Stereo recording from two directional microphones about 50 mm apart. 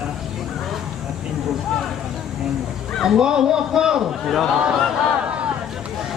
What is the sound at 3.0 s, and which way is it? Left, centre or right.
A man's voice, centre.